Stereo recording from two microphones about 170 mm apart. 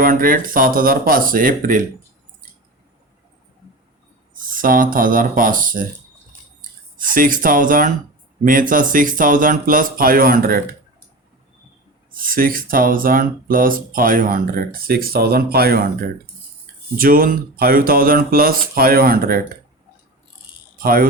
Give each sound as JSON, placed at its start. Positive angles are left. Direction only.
{"t": 0.0, "sound": "speech", "side_deg": -55}
{"t": 4.4, "sound": "speech", "side_deg": -55}
{"t": 7.0, "sound": "speech", "side_deg": -55}
{"t": 12.1, "sound": "speech", "side_deg": -55}
{"t": 17.0, "sound": "speech", "side_deg": -55}
{"t": 20.7, "sound": "speech", "side_deg": -60}